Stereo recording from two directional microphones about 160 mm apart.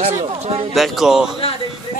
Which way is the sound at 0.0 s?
35° right (ahead or behind).